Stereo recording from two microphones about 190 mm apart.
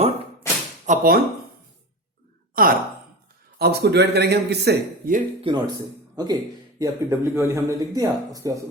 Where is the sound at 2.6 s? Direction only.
50° right (ahead or behind).